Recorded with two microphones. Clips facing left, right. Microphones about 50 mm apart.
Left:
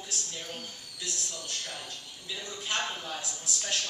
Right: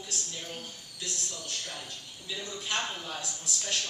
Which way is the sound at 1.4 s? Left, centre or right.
Centre.